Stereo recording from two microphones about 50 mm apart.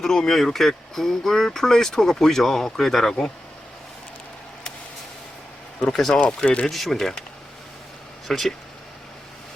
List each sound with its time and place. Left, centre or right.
0.0 s speech: centre
6.1 s speech: left
6.7 s speech: centre
8.3 s speech: centre